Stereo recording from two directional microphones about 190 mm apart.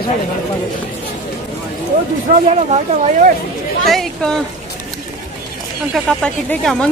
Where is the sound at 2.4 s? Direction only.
35° right (ahead or behind).